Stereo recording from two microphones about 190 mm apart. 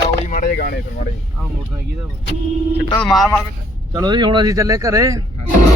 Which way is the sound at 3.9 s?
25° right (ahead or behind).